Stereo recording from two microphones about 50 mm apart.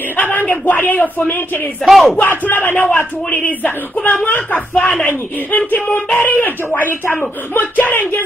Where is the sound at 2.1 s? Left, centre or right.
Left.